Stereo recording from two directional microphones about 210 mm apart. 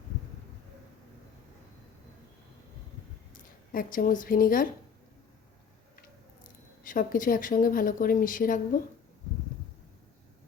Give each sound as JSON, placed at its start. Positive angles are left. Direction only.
{"t": 3.7, "sound": "speech", "side_deg": 40}
{"t": 6.0, "sound": "speech", "side_deg": 40}